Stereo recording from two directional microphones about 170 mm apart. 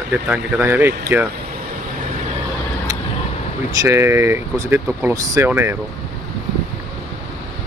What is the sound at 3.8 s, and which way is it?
Speech, 15° right (ahead or behind).